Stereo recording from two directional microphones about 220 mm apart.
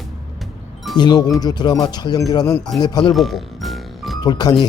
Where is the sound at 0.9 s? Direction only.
20° left (ahead or behind).